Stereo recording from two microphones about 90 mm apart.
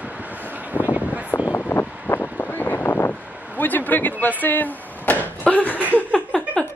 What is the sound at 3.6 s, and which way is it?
Speech, 20° left (ahead or behind).